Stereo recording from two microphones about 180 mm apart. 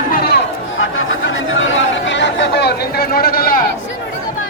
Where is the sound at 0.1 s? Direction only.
60° left (ahead or behind).